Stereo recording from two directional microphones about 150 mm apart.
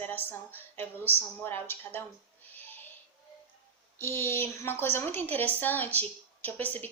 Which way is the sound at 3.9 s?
15° left (ahead or behind).